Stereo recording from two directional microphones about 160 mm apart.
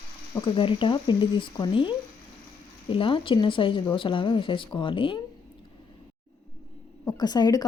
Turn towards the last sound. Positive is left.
turn(degrees=25)  # may be behind; listen again after turning